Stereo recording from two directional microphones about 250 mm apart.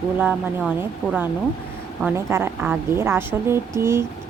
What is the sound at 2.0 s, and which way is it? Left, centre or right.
Speech, centre.